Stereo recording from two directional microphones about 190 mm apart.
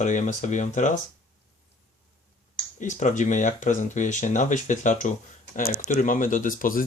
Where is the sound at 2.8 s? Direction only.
40° left (ahead or behind).